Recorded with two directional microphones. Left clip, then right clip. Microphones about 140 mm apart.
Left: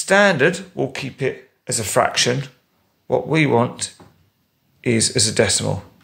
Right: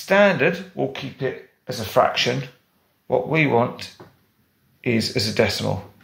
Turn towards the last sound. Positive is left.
turn(degrees=35)  # may be behind; listen again after turning